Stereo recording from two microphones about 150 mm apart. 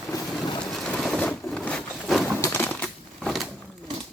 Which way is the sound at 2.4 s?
15° left (ahead or behind).